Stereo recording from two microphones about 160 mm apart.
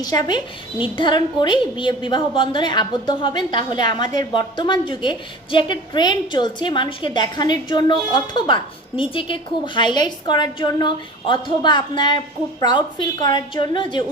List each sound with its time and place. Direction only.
0.0 s a woman's voice: 25° left (ahead or behind)